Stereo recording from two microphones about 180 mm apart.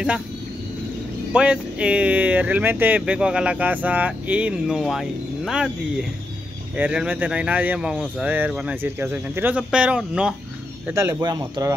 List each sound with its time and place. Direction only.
1.3 s speech: 5° right (ahead or behind); by 11.7 s 25° right (ahead or behind)